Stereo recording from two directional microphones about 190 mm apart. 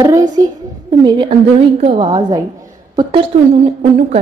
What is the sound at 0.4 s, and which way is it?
A child's voice, 20° right (ahead or behind).